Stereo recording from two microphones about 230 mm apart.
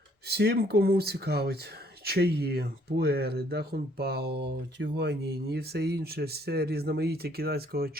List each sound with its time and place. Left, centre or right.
0.3 s speech: right